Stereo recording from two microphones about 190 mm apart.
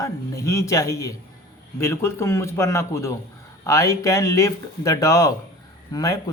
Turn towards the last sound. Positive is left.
turn(degrees=20)  # may be behind; listen again after turning